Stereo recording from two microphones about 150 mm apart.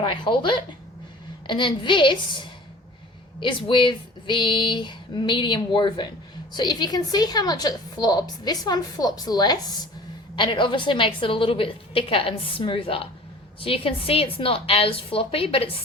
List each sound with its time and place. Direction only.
0.0 s a woman's voice: 35° left (ahead or behind)